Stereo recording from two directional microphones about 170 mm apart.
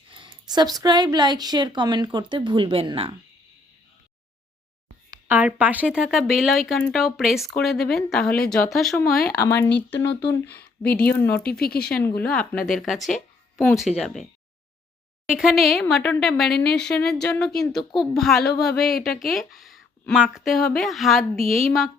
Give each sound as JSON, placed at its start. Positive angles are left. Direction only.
{"t": 0.1, "sound": "speech", "side_deg": -25}
{"t": 5.3, "sound": "a woman's voice", "side_deg": -10}
{"t": 9.6, "sound": "speech", "side_deg": 90}
{"t": 10.8, "sound": "speech", "side_deg": 10}
{"t": 11.6, "sound": "speech", "side_deg": 65}
{"t": 11.9, "sound": "a woman's voice", "side_deg": 5}
{"t": 15.3, "sound": "a woman's voice", "side_deg": -5}